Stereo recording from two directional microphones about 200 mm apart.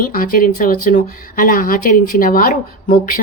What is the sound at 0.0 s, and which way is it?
Speech, 45° left (ahead or behind).